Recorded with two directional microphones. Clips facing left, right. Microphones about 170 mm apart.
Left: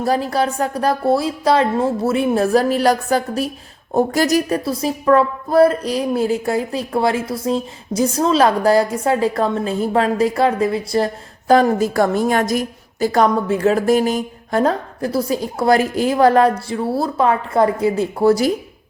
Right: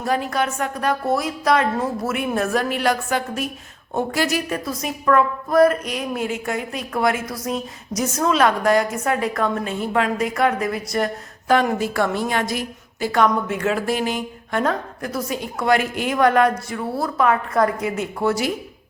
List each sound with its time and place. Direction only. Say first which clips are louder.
0.0 s a woman's voice: left 4 dB; 35° left (ahead or behind)